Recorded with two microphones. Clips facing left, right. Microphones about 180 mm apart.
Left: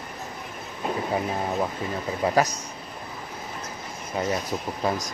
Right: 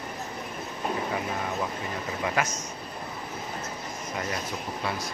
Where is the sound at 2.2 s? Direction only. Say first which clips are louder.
Left 7 dB; 35° left (ahead or behind).